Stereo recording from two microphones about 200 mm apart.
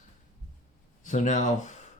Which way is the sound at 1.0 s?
40° left (ahead or behind).